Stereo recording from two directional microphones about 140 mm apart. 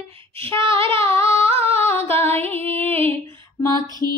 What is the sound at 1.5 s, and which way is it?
Humming, 45° right (ahead or behind).